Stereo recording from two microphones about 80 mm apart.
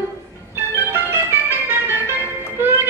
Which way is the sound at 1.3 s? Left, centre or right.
Right.